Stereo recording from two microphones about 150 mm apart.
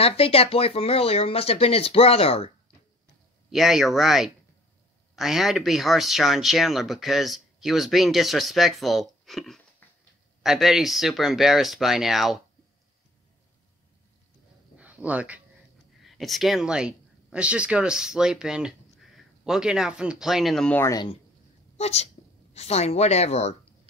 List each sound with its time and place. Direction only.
0.0 s speech: 40° left (ahead or behind)
3.4 s speech: centre (ahead or behind)
14.8 s a sound: 10° right (ahead or behind)
16.0 s speech: centre (ahead or behind)
20.7 s speech: 15° left (ahead or behind)
21.7 s speech: 45° left (ahead or behind)